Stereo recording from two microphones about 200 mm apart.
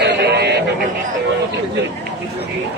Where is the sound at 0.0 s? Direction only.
55° right (ahead or behind).